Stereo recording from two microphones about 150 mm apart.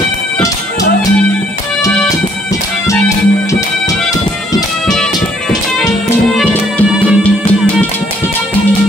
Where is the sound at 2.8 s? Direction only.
20° left (ahead or behind).